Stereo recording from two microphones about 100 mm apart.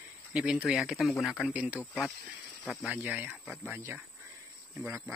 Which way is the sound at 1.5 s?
15° right (ahead or behind).